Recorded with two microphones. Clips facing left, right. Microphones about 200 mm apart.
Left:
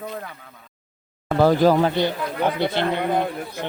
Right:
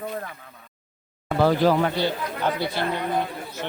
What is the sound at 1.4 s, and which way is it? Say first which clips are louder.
Speech: left 3 dB; 45° left (ahead or behind).